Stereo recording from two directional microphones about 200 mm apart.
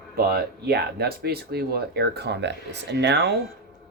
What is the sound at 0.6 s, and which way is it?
Speech, 50° right (ahead or behind).